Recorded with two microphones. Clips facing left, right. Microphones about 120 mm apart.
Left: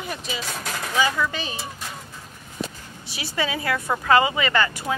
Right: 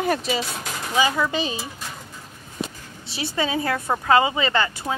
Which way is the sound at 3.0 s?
25° right (ahead or behind).